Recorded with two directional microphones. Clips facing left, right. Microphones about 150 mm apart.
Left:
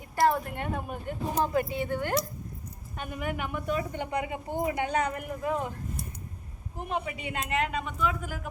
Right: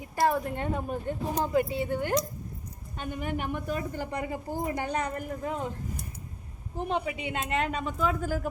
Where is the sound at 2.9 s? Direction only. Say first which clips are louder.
Right 1 dB; 30° right (ahead or behind).